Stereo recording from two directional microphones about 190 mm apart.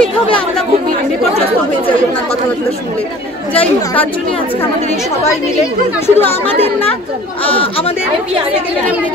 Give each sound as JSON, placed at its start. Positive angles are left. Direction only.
{"t": 3.5, "sound": "a woman's voice", "side_deg": 10}
{"t": 6.0, "sound": "a woman's voice", "side_deg": 10}
{"t": 6.6, "sound": "speech", "side_deg": 30}